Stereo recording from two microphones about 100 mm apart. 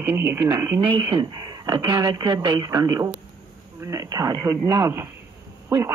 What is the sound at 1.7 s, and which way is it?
Speech, 45° right (ahead or behind).